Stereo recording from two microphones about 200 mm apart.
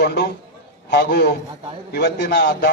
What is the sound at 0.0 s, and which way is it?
A man's voice, 55° left (ahead or behind).